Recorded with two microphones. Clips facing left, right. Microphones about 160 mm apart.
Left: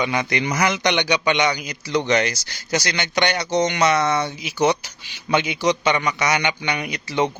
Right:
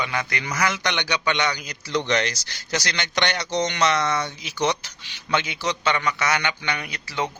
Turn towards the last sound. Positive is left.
turn(degrees=20)  # may be behind; listen again after turning